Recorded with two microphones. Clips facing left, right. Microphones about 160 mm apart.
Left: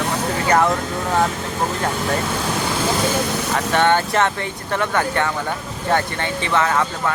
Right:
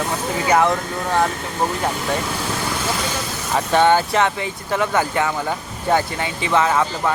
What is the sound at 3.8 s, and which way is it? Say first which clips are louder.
Speech: right 2 dB; 5° right (ahead or behind).